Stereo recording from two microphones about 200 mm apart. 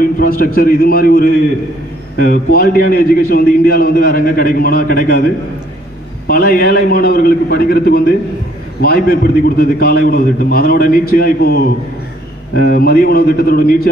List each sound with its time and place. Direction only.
0.0 s a man's voice: 45° left (ahead or behind)